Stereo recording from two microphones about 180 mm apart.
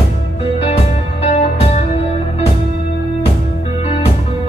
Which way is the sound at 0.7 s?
35° left (ahead or behind).